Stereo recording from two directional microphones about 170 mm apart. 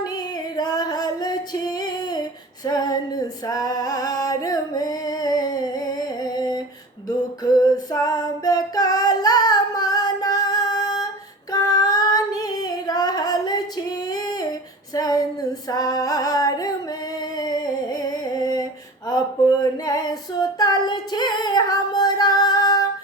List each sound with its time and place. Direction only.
0.0 s music: 25° left (ahead or behind)
7.4 s female singing: 25° left (ahead or behind)
17.2 s a sound: 25° left (ahead or behind)
20.6 s female singing: 25° left (ahead or behind)